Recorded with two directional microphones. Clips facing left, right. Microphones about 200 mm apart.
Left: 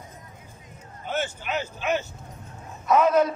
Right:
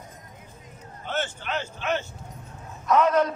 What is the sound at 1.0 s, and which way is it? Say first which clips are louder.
A man's voice: left 1 dB; 10° left (ahead or behind).